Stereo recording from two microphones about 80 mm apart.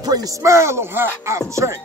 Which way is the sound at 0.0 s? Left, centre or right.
Right.